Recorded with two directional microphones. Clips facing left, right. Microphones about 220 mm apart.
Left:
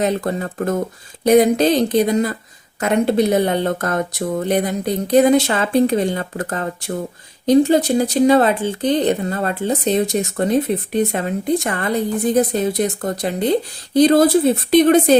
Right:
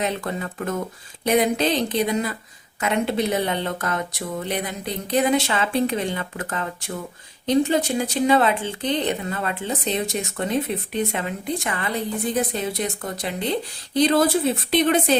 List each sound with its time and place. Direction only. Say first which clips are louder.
0.0 s speech: left 6 dB; 40° left (ahead or behind)